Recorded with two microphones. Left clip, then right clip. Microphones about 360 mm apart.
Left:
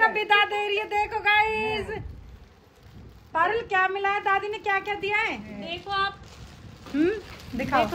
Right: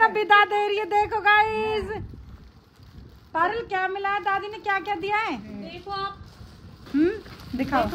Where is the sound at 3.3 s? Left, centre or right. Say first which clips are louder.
Even; right.